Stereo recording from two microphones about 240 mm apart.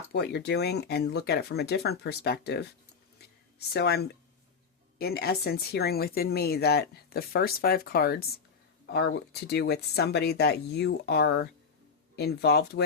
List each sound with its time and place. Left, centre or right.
0.1 s speech: left
3.7 s speech: left